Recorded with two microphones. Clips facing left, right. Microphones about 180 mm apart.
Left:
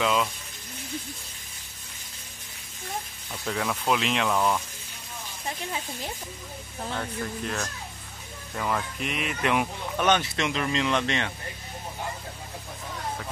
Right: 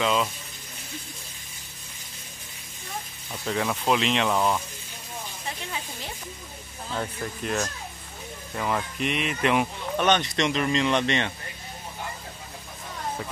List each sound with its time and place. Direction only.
0.0 s speech: centre (ahead or behind)
3.3 s speech: 5° right (ahead or behind)
4.3 s speech: 10° right (ahead or behind)
7.0 s speech: 15° right (ahead or behind)
8.5 s speech: 5° right (ahead or behind)